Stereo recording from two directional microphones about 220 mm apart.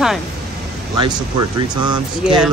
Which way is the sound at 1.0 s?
20° right (ahead or behind).